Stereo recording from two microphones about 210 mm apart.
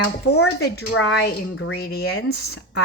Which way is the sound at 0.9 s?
60° left (ahead or behind).